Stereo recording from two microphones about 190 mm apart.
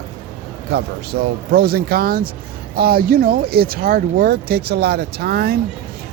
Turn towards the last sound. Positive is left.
turn(degrees=-55)  # may be behind; listen again after turning